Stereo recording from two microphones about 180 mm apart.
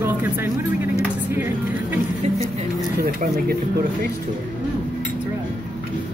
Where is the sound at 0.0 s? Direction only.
10° right (ahead or behind).